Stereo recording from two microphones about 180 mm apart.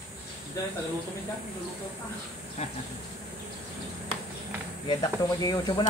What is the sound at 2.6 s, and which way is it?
Speech, 35° left (ahead or behind).